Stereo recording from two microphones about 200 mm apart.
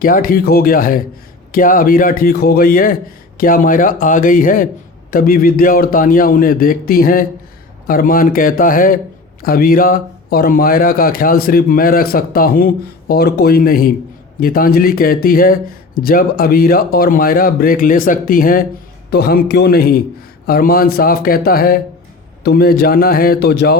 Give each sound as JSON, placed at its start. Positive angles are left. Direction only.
{"t": 0.0, "sound": "speech", "side_deg": 45}